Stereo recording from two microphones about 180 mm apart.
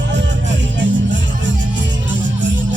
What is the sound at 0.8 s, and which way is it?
Music, 90° right.